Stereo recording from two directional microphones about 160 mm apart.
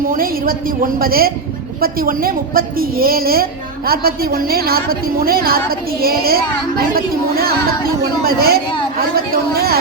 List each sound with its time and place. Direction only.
0.1 s a woman's voice: 65° right (ahead or behind)